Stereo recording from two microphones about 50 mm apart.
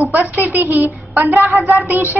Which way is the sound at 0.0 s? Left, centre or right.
Right.